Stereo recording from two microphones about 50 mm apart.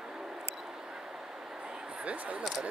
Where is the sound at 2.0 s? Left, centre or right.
Right.